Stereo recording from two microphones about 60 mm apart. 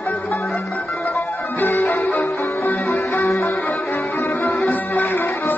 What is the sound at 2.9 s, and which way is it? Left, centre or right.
Music, left.